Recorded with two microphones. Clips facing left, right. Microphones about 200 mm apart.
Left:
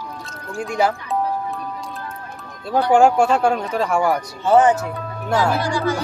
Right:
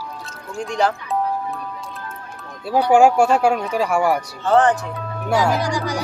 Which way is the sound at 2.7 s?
10° right (ahead or behind).